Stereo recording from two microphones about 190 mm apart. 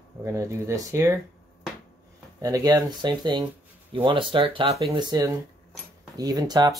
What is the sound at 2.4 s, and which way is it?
Speech, 20° right (ahead or behind).